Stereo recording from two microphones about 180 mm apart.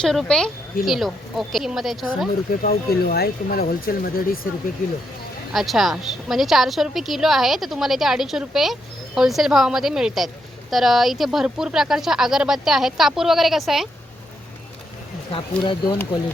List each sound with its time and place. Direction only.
0.0 s a woman's voice: 5° left (ahead or behind)
2.5 s speech: 60° left (ahead or behind)
5.5 s a woman's voice: centre (ahead or behind)
15.3 s speech: 30° left (ahead or behind)